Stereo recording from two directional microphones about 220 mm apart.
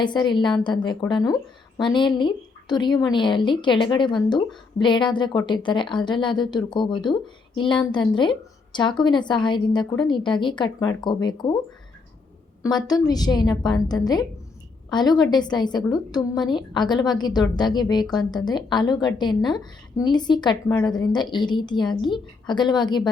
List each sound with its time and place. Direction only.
0.0 s a woman's voice: 20° left (ahead or behind)
12.6 s a woman's voice: 15° left (ahead or behind)